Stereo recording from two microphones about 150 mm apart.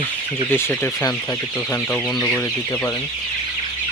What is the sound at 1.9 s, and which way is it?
Speech, centre (ahead or behind).